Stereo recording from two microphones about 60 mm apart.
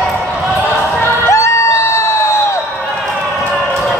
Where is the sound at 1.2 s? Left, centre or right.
Left.